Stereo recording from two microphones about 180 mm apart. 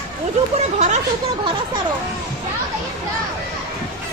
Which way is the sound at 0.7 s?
40° right (ahead or behind).